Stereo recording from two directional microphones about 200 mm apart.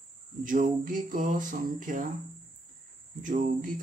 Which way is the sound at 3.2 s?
40° right (ahead or behind).